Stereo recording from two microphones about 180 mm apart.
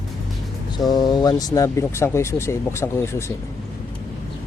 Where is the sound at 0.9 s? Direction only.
20° left (ahead or behind).